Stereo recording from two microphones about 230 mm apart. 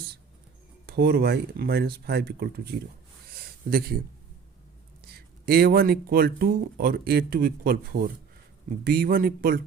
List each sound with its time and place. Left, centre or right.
0.9 s speech: right
3.3 s a sound: right
5.1 s speech: right